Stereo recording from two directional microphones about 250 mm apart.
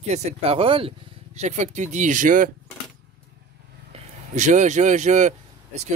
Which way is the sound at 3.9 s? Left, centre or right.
Right.